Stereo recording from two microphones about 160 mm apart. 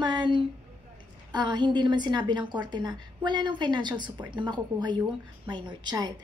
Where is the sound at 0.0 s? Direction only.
30° right (ahead or behind).